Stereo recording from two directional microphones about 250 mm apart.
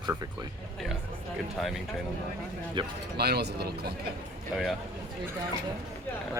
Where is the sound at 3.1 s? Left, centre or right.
Right.